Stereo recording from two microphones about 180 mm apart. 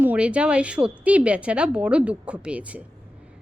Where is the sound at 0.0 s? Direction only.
10° right (ahead or behind).